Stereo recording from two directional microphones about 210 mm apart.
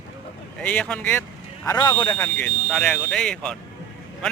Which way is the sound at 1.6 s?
15° left (ahead or behind).